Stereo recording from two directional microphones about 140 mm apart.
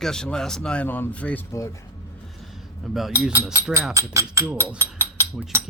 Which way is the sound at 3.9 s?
20° right (ahead or behind).